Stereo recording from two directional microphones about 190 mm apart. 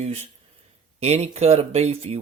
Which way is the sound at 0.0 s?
35° right (ahead or behind).